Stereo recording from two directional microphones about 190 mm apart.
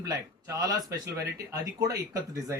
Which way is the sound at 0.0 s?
20° right (ahead or behind).